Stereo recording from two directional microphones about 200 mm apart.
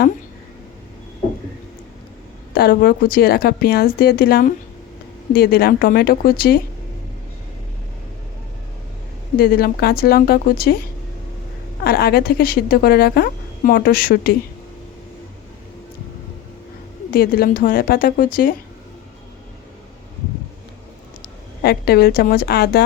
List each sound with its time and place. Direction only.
2.6 s a woman's voice: 50° left (ahead or behind)
9.4 s a woman's voice: 50° left (ahead or behind)
11.8 s a woman's voice: 50° left (ahead or behind)
17.1 s a woman's voice: 50° left (ahead or behind)
21.6 s a woman's voice: 50° left (ahead or behind)